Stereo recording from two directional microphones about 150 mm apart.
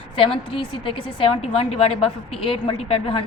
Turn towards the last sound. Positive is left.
turn(degrees=35)  # may be behind; listen again after turning